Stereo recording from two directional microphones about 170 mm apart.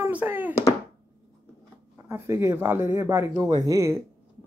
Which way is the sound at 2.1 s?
15° right (ahead or behind).